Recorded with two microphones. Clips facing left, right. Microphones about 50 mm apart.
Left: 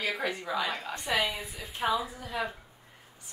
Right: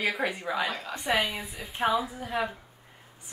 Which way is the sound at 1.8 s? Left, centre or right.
Right.